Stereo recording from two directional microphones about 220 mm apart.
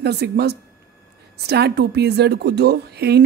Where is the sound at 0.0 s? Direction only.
50° right (ahead or behind).